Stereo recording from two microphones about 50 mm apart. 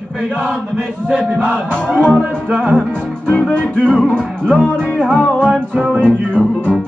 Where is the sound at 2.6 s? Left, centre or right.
Centre.